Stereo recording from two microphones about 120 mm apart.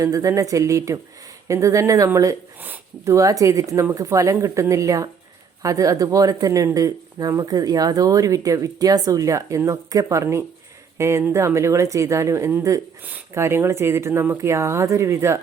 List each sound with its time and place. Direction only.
0.0 s speech: 30° right (ahead or behind)
2.6 s speech: 15° right (ahead or behind)
3.0 s speech: 25° right (ahead or behind)